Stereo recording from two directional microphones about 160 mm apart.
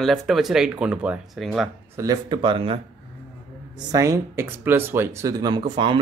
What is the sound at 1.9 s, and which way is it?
Speech, 20° right (ahead or behind).